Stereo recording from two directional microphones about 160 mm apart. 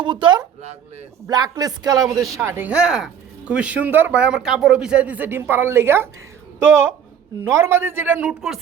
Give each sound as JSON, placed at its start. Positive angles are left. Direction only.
{"t": 0.0, "sound": "speech", "side_deg": -30}